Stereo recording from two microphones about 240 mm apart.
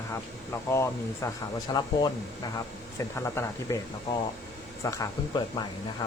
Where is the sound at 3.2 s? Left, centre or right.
Centre.